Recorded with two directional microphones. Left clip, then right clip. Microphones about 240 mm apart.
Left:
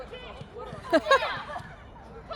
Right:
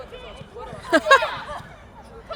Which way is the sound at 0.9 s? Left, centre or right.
Right.